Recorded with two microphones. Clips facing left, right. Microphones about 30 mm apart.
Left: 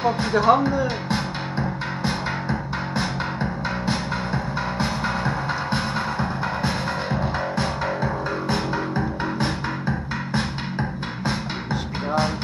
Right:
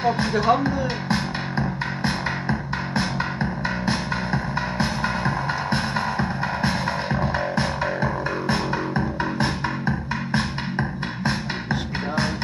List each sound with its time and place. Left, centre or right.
0.0 s speech: centre
3.8 s music: centre
10.3 s music: centre